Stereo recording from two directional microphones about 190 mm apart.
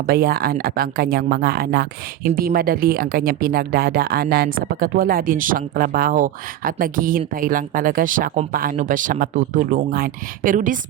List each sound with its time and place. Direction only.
0.1 s speech: 55° right (ahead or behind)